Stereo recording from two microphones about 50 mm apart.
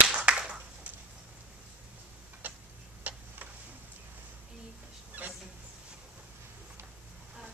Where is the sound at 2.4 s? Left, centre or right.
Right.